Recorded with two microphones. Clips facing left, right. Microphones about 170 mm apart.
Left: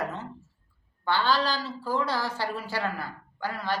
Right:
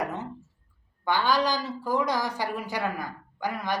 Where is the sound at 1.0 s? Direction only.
15° right (ahead or behind).